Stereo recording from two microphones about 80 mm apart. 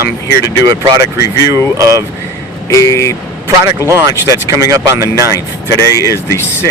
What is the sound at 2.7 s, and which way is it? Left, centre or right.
Speech, left.